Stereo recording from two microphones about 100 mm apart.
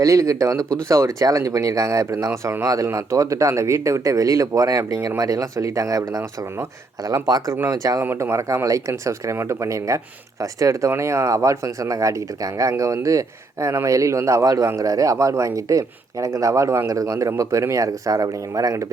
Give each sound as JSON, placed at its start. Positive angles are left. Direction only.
{"t": 0.0, "sound": "speech", "side_deg": -35}
{"t": 0.6, "sound": "speech", "side_deg": 10}
{"t": 0.9, "sound": "speech", "side_deg": -35}
{"t": 8.0, "sound": "speech", "side_deg": -25}